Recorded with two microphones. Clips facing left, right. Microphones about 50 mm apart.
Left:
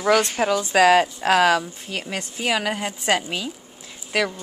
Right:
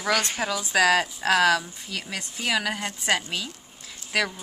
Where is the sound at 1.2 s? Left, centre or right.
Centre.